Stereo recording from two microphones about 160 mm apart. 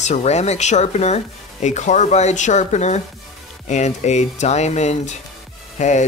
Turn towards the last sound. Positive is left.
turn(degrees=50)  # may be behind; listen again after turning